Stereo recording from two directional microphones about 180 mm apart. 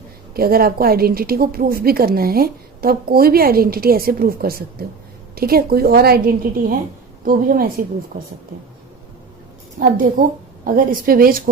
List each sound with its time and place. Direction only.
0.3 s a woman's voice: 55° right (ahead or behind)
9.8 s a woman's voice: 50° right (ahead or behind)